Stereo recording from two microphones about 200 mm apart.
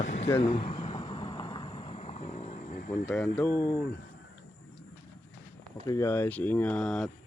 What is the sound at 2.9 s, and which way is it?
Speech, 10° left (ahead or behind).